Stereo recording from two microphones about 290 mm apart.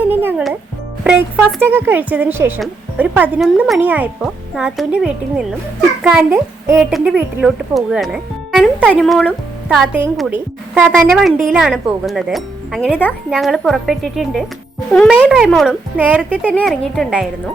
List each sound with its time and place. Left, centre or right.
0.0 s a woman's voice: centre